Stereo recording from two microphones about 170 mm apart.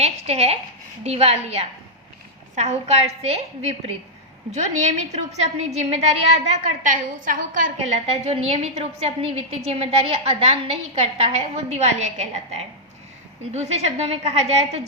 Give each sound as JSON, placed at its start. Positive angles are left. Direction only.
{"t": 0.0, "sound": "a woman's voice", "side_deg": -40}
{"t": 6.8, "sound": "a woman's voice", "side_deg": -50}
{"t": 8.1, "sound": "a woman's voice", "side_deg": -35}